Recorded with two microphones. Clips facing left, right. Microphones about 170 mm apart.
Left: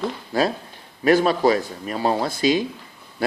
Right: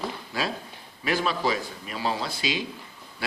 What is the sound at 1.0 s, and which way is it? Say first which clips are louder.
Speech: left 9 dB; 45° left (ahead or behind).